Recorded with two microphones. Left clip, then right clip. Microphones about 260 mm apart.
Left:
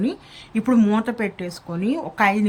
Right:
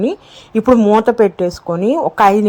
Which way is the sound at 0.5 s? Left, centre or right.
Right.